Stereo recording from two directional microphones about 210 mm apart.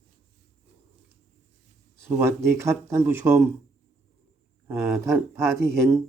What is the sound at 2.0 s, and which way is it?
Speech, 10° right (ahead or behind).